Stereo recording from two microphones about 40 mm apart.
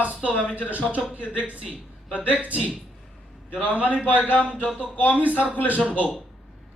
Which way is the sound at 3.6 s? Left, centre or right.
Right.